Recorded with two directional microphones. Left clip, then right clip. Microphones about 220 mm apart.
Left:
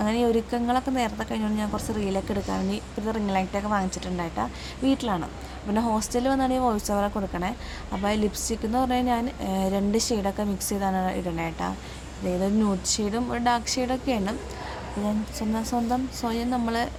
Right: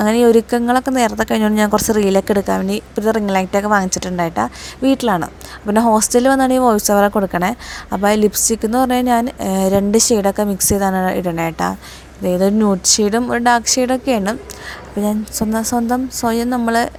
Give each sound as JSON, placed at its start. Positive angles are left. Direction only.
{"t": 0.0, "sound": "speech", "side_deg": -35}